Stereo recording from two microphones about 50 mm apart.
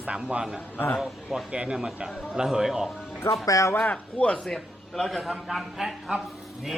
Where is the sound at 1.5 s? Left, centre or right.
Right.